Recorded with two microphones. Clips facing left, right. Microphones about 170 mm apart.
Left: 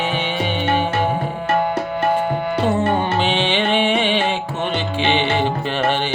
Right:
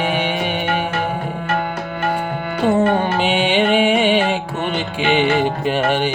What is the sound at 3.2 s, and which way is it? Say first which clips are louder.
Music: right 3 dB; 10° right (ahead or behind).